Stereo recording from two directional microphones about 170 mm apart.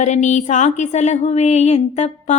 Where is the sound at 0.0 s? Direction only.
45° left (ahead or behind).